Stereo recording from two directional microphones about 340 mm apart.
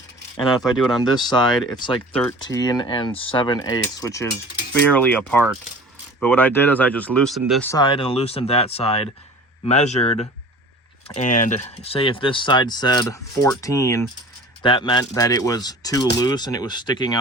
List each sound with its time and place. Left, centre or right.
0.6 s speech: centre
1.0 s speech: centre